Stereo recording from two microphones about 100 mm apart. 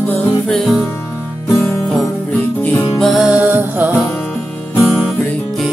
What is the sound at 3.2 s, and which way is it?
Music, 15° right (ahead or behind).